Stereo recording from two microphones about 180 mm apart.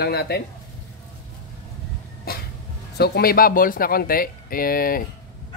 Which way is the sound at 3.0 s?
60° left (ahead or behind).